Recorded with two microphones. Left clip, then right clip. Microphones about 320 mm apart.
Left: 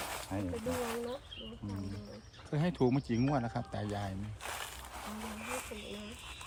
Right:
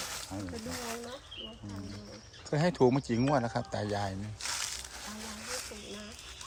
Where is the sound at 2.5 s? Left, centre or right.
Centre.